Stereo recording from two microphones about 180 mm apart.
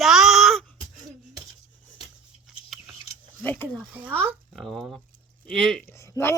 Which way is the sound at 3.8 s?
5° right (ahead or behind).